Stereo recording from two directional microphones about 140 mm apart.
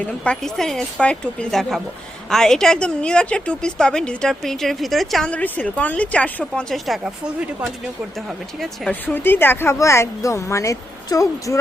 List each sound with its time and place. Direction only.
0.0 s a woman's voice: 5° left (ahead or behind)
8.9 s speech: 15° left (ahead or behind)